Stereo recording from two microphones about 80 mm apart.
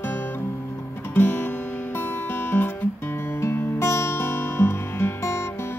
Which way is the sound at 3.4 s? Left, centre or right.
Left.